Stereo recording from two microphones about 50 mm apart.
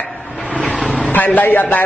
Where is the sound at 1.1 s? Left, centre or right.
Left.